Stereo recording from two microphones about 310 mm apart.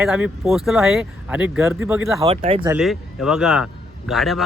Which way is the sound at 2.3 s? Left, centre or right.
Centre.